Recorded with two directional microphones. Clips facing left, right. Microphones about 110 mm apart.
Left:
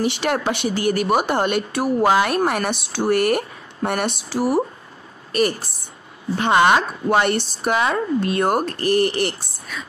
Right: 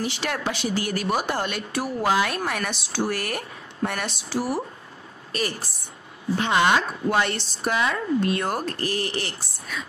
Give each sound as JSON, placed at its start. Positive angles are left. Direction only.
{"t": 0.0, "sound": "a woman's voice", "side_deg": 60}